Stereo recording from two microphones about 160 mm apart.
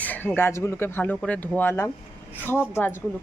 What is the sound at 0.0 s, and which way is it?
Speech, 10° left (ahead or behind).